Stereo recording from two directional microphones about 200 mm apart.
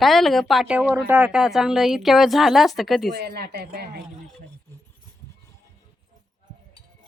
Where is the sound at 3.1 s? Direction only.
50° right (ahead or behind).